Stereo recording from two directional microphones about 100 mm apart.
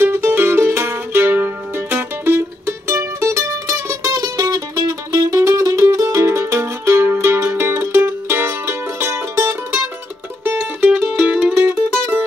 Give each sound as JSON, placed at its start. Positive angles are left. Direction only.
{"t": 0.0, "sound": "music", "side_deg": -25}